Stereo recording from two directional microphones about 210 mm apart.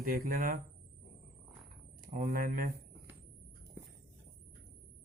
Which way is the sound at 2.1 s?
40° right (ahead or behind).